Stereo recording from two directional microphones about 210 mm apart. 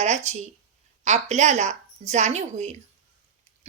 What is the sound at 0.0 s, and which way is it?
A woman's voice, 35° right (ahead or behind).